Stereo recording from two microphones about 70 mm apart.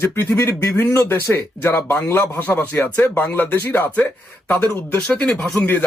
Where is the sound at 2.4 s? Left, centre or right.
Left.